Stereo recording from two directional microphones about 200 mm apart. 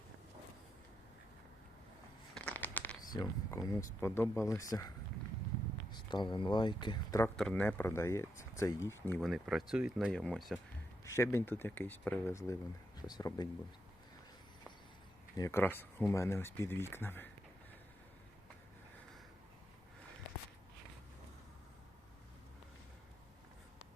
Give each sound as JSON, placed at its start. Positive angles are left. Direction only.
{"t": 2.3, "sound": "a sound", "side_deg": 5}
{"t": 3.1, "sound": "speech", "side_deg": 20}
{"t": 5.9, "sound": "speech", "side_deg": 20}
{"t": 7.3, "sound": "speech", "side_deg": 5}
{"t": 11.0, "sound": "speech", "side_deg": 15}
{"t": 15.4, "sound": "speech", "side_deg": 15}